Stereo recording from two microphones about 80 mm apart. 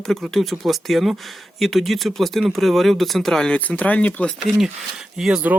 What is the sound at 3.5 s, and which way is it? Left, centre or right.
Speech, centre.